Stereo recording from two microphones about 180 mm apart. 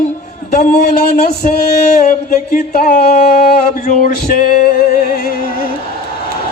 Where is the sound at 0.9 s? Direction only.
60° left (ahead or behind).